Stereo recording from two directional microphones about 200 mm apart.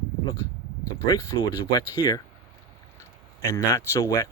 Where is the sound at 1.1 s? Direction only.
20° left (ahead or behind).